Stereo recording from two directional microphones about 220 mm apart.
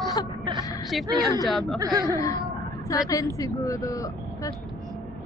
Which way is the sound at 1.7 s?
15° right (ahead or behind).